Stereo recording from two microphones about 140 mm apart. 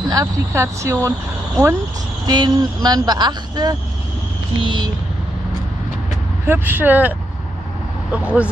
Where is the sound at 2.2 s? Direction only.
30° right (ahead or behind).